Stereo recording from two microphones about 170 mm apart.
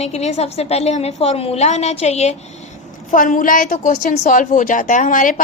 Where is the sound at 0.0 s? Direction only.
40° left (ahead or behind).